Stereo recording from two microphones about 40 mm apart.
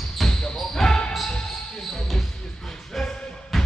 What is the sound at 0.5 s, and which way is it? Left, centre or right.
Basketball bounce, centre.